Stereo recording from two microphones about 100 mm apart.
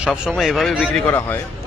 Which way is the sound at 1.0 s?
20° left (ahead or behind).